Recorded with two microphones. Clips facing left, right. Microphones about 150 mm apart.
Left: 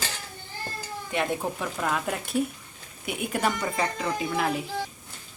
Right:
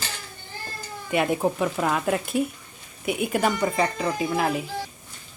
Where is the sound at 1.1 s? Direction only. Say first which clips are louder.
Right 6 dB; 5° right (ahead or behind).